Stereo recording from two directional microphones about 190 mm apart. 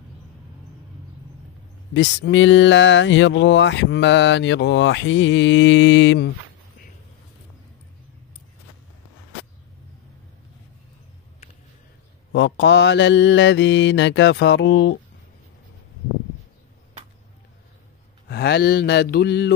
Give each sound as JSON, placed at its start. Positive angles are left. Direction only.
{"t": 2.0, "sound": "speech", "side_deg": 70}
{"t": 12.3, "sound": "speech", "side_deg": 75}
{"t": 18.3, "sound": "mantra", "side_deg": 60}